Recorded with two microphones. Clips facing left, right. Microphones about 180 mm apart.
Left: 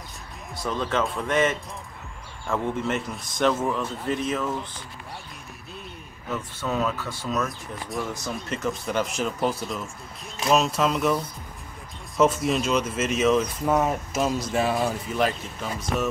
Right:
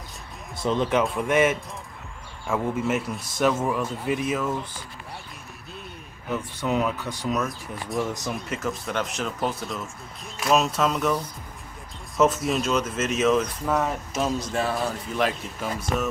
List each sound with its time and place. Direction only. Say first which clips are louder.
0.6 s a man's voice: right 3 dB; 20° right (ahead or behind); by 4.2 s 5° right (ahead or behind)
6.2 s a man's voice: right 2 dB; 15° right (ahead or behind)
7.4 s speech: right 1 dB; centre (ahead or behind)
12.2 s speech: even; centre (ahead or behind)
14.8 s speech: left 1 dB; centre (ahead or behind)